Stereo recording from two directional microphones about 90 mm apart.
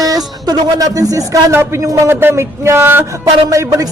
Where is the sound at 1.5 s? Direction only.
30° right (ahead or behind).